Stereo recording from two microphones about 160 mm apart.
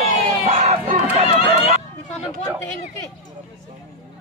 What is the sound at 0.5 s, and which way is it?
Crowd, 40° right (ahead or behind).